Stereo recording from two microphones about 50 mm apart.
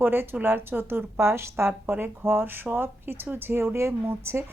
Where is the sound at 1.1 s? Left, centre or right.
Right.